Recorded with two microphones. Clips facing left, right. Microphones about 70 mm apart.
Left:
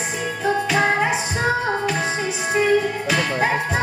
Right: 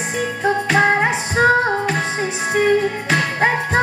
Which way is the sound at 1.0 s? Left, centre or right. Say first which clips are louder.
Right 5 dB; right.